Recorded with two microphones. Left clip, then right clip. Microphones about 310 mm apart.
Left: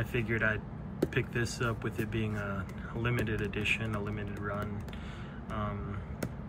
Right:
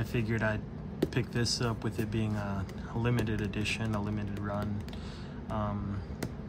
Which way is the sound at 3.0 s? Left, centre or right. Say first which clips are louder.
Even; centre.